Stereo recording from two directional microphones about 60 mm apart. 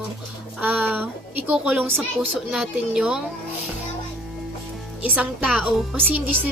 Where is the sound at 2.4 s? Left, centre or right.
Centre.